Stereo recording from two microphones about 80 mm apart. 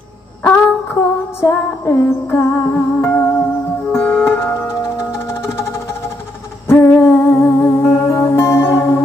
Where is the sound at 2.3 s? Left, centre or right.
Left.